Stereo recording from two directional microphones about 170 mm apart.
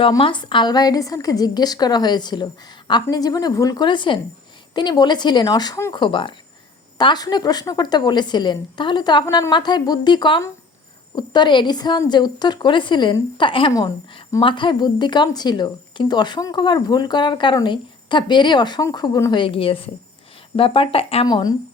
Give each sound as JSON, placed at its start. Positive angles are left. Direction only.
{"t": 0.0, "sound": "a woman's voice", "side_deg": 30}
{"t": 21.2, "sound": "a woman's voice", "side_deg": 25}